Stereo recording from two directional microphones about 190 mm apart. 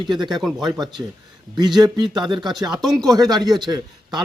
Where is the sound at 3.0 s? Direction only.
20° right (ahead or behind).